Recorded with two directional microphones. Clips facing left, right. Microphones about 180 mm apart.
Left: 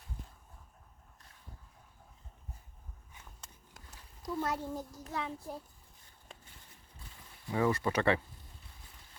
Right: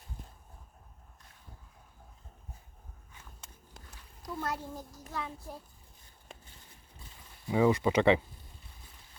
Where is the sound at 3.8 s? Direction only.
25° right (ahead or behind).